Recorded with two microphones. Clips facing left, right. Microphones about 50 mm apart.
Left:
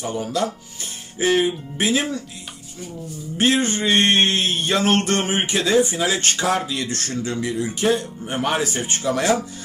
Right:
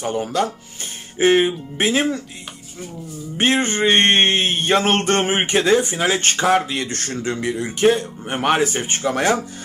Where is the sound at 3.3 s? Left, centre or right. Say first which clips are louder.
Right 1 dB; right.